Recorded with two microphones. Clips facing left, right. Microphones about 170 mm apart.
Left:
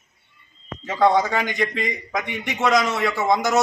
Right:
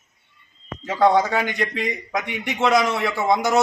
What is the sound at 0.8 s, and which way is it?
A man's voice, 5° right (ahead or behind).